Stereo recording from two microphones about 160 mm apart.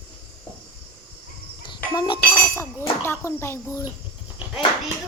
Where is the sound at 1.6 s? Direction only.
30° left (ahead or behind).